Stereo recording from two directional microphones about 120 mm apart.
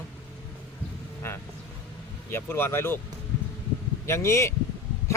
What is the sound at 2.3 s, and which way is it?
Speech, 20° left (ahead or behind).